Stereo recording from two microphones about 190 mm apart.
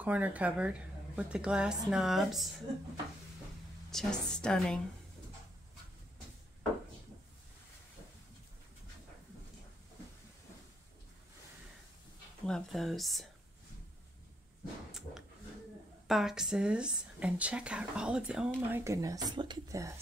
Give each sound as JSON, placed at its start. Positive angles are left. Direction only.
{"t": 0.0, "sound": "a woman's voice", "side_deg": -10}
{"t": 3.9, "sound": "a woman's voice", "side_deg": 5}
{"t": 12.4, "sound": "a woman's voice", "side_deg": 0}
{"t": 14.9, "sound": "a sound", "side_deg": 0}
{"t": 16.1, "sound": "a woman's voice", "side_deg": 0}